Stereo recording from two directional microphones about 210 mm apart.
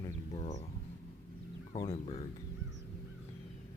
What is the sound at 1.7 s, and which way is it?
Speech, 15° left (ahead or behind).